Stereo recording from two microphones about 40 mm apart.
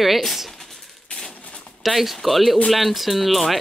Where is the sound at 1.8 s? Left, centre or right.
Centre.